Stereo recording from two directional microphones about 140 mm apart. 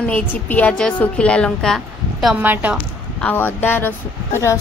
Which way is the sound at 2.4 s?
10° right (ahead or behind).